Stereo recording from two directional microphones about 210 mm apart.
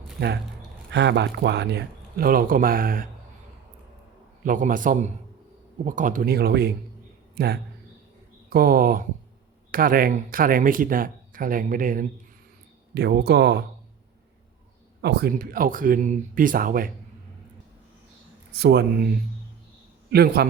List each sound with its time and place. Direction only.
0.9 s speech: 55° right (ahead or behind)
4.4 s a man's voice: 40° right (ahead or behind)
12.9 s speech: 50° right (ahead or behind)
15.0 s speech: 50° right (ahead or behind)
18.5 s speech: 50° right (ahead or behind)
20.1 s a man's voice: 50° right (ahead or behind)